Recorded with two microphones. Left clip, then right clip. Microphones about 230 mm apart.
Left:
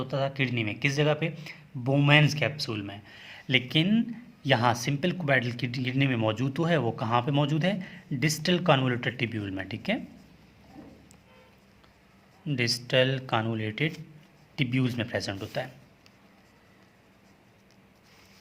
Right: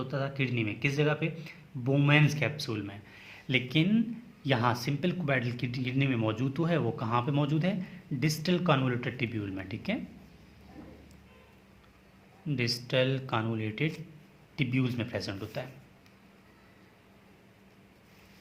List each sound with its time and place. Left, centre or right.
0.0 s speech: left
12.5 s speech: left